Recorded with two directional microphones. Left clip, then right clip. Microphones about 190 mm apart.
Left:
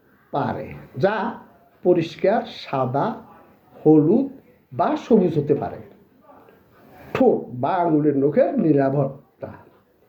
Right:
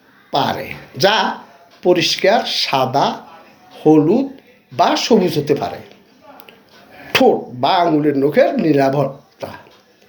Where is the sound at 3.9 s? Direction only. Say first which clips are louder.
Right 4 dB; 5° right (ahead or behind).